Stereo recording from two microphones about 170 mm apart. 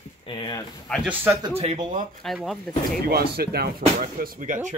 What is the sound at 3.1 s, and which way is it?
Speech, 65° right (ahead or behind).